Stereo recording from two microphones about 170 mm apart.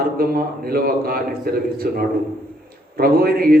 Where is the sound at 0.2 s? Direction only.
60° right (ahead or behind).